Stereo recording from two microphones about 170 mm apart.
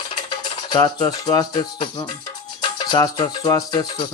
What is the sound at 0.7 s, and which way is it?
Speech, 25° left (ahead or behind).